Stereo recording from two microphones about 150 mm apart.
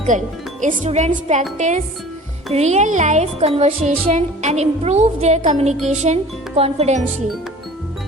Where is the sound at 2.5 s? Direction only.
50° right (ahead or behind).